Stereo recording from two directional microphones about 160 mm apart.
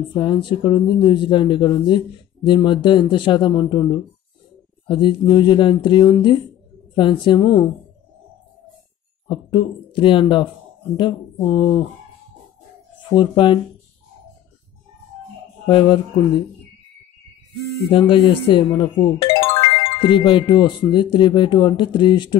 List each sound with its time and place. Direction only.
0.1 s speech: 30° left (ahead or behind)
9.3 s speech: 30° left (ahead or behind)
15.6 s speech: 30° left (ahead or behind)
17.9 s speech: 30° left (ahead or behind)